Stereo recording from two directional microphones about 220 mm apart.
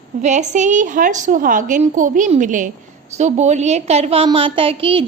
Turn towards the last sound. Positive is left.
turn(degrees=-25)  # may be behind; listen again after turning